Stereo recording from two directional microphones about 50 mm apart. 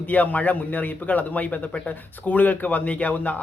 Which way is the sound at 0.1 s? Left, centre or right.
Left.